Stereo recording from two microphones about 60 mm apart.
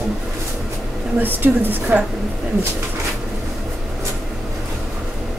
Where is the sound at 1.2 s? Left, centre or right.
Right.